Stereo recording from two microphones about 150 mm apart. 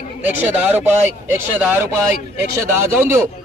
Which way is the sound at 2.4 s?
15° right (ahead or behind).